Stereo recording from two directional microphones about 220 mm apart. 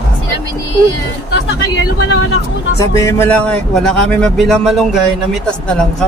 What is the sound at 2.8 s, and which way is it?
Speech, 15° left (ahead or behind).